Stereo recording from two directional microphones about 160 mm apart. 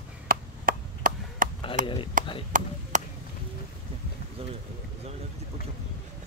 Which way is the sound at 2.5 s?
55° right (ahead or behind).